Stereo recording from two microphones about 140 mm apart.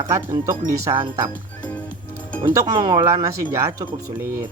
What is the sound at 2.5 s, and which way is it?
Speech, 25° right (ahead or behind).